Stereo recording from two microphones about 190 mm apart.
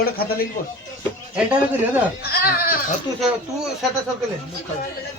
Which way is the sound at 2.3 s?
55° left (ahead or behind).